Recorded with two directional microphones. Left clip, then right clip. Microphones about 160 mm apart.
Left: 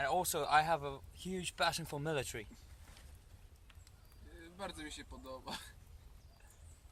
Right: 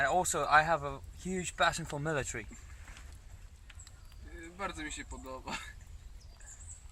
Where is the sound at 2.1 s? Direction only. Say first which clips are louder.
Right 4 dB; 35° left (ahead or behind).